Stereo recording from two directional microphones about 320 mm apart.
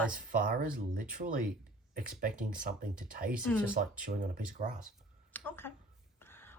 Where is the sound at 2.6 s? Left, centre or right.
Right.